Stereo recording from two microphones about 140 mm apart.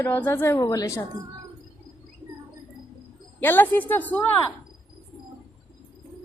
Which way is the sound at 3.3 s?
15° left (ahead or behind).